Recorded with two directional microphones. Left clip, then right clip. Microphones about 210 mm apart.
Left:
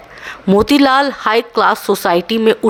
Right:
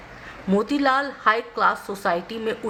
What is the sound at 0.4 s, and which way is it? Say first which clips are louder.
A woman's voice: left 10 dB; 45° left (ahead or behind).